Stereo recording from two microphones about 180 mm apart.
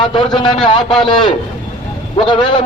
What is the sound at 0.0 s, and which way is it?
Speech, 25° left (ahead or behind).